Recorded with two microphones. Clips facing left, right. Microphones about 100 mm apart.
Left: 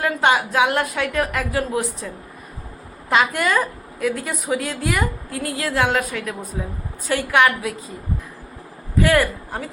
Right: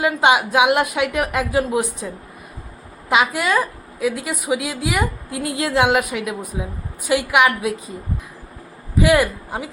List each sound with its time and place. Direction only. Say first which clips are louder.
0.0 s a woman's voice: right 2 dB; 15° right (ahead or behind)
3.1 s a woman's voice: right 1 dB; 5° right (ahead or behind)
9.0 s speech: right 2 dB; 15° right (ahead or behind)